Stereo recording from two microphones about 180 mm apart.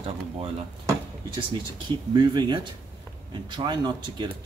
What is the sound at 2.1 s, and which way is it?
Speech, 25° right (ahead or behind).